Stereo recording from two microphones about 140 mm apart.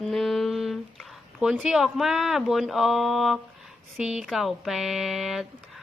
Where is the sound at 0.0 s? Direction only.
Centre (ahead or behind).